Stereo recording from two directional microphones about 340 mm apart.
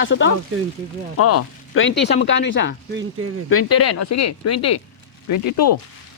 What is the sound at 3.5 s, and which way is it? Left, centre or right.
Speech, left.